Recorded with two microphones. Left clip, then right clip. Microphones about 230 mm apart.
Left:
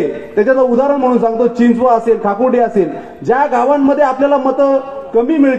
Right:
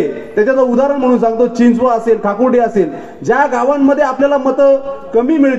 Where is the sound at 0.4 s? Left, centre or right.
Right.